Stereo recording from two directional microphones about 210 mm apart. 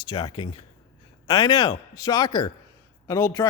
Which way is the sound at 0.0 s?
20° left (ahead or behind).